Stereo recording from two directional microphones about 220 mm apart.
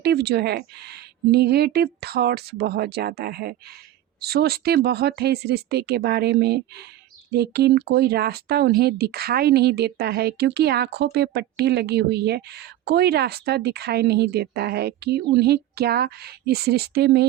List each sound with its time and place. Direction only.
0.0 s speech: 45° right (ahead or behind)